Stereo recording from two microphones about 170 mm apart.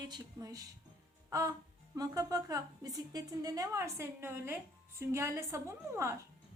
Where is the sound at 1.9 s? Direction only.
20° right (ahead or behind).